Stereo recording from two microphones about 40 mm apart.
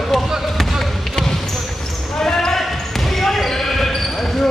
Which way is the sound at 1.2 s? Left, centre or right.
Centre.